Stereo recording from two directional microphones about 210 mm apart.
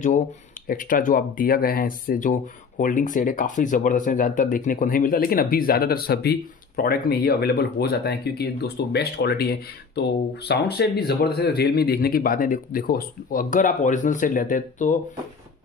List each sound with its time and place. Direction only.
0.7 s a man's voice: 40° left (ahead or behind)